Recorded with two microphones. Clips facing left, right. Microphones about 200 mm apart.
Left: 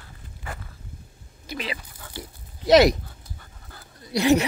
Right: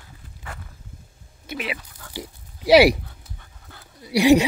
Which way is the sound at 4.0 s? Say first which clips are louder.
Right 4 dB; 10° right (ahead or behind).